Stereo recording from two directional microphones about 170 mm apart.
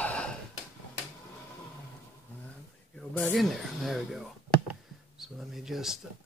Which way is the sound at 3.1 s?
5° left (ahead or behind).